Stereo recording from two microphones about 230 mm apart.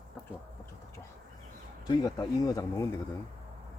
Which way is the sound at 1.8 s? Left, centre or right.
Centre.